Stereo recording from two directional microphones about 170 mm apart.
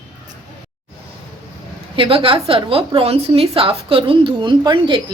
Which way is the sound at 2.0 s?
30° right (ahead or behind).